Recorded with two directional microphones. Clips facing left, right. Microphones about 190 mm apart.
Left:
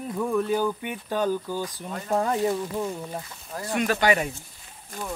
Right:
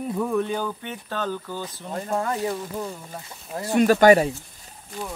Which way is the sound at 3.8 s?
40° right (ahead or behind).